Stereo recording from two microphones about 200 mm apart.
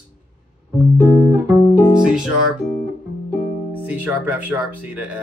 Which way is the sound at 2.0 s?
5° right (ahead or behind).